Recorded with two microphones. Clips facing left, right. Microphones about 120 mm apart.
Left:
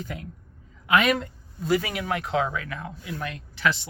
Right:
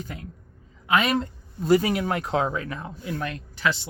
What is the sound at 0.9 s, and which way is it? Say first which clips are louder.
Speech: left 1 dB; 30° right (ahead or behind).